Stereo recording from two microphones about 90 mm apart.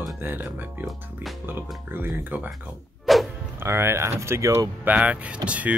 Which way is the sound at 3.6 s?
30° right (ahead or behind).